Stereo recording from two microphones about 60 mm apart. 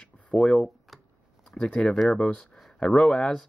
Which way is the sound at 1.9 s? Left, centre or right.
Centre.